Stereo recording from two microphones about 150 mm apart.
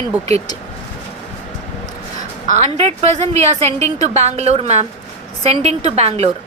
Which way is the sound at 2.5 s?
50° right (ahead or behind).